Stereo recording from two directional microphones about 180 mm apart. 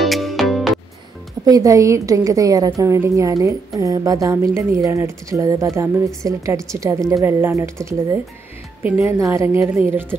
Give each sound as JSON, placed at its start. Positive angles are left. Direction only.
{"t": 0.0, "sound": "music", "side_deg": 0}
{"t": 1.4, "sound": "a woman's voice", "side_deg": -20}
{"t": 8.8, "sound": "a woman's voice", "side_deg": -10}